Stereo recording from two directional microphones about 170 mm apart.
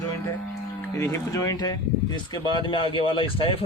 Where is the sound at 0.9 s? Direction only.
15° left (ahead or behind); by 3.6 s 30° left (ahead or behind).